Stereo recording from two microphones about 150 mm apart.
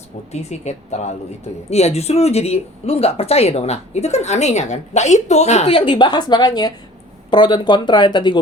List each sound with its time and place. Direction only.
0.3 s speech: 45° left (ahead or behind); by 8.4 s 30° left (ahead or behind)